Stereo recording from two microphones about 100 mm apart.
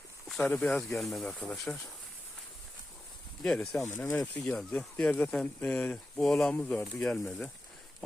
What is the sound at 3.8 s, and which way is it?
Speech, 25° left (ahead or behind).